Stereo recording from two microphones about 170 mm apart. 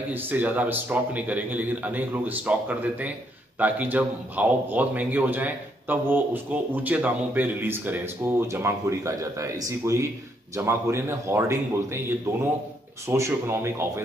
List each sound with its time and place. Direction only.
0.1 s a man's voice: 10° right (ahead or behind)
13.0 s a man's voice: 15° right (ahead or behind)